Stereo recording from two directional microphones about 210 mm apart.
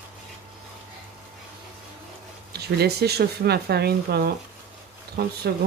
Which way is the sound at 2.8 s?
50° right (ahead or behind).